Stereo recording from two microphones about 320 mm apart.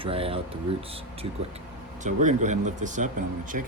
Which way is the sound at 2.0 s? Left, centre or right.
Right.